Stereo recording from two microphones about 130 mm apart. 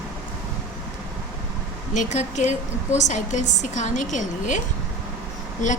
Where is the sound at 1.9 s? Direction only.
65° left (ahead or behind).